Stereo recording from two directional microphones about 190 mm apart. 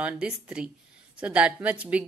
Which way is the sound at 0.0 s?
5° right (ahead or behind).